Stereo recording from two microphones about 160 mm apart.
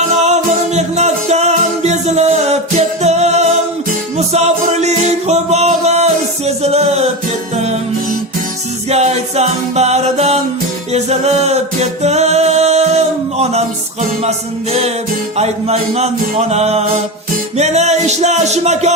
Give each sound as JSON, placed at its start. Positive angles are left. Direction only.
{"t": 0.2, "sound": "music", "side_deg": -45}
{"t": 8.9, "sound": "music", "side_deg": -40}
{"t": 10.9, "sound": "a capella", "side_deg": -40}
{"t": 14.3, "sound": "music", "side_deg": -40}